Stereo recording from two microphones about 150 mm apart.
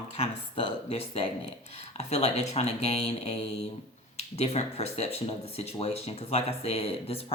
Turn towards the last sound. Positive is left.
turn(degrees=40)  # may be behind; listen again after turning